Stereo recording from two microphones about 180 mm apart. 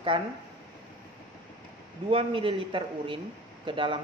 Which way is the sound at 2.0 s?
30° right (ahead or behind).